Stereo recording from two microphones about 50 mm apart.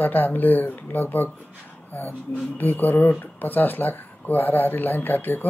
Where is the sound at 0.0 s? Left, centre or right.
Left.